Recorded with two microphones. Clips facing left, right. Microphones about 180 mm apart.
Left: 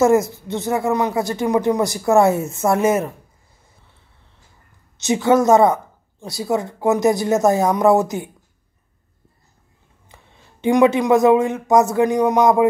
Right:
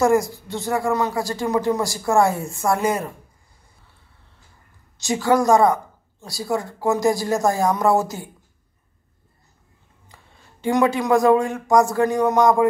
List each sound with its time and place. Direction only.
0.0 s speech: 25° left (ahead or behind)
4.9 s speech: 20° left (ahead or behind)
10.0 s speech: 20° left (ahead or behind)